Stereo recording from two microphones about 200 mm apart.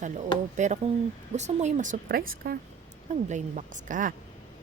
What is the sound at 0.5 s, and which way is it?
Speech, 35° right (ahead or behind).